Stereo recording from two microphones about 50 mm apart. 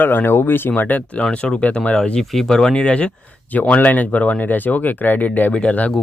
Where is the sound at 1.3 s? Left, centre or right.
Left.